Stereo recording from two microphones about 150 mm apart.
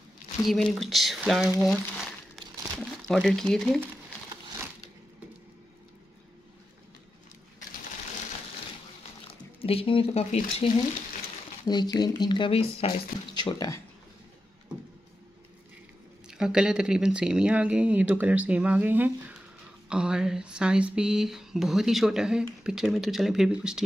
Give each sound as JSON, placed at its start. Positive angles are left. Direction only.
{"t": 0.5, "sound": "a sound", "side_deg": 0}
{"t": 1.6, "sound": "crumpling", "side_deg": 0}
{"t": 9.3, "sound": "speech", "side_deg": 40}
{"t": 11.6, "sound": "speech", "side_deg": 30}
{"t": 14.7, "sound": "vehicle", "side_deg": -5}
{"t": 16.3, "sound": "speech", "side_deg": -5}
{"t": 19.9, "sound": "a sound", "side_deg": -5}